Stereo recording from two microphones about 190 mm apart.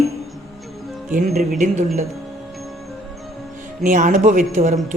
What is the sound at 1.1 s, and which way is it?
Speech, 45° right (ahead or behind).